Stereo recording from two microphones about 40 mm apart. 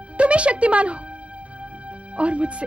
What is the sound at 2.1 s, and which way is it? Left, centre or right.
Speech, right.